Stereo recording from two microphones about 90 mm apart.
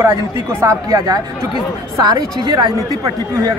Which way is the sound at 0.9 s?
45° right (ahead or behind).